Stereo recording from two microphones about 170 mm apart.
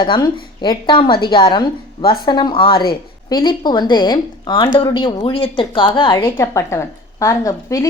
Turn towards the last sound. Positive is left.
turn(degrees=20)  # may be behind; listen again after turning